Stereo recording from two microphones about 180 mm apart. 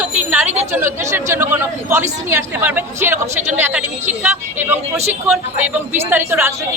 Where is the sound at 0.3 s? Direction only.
10° right (ahead or behind).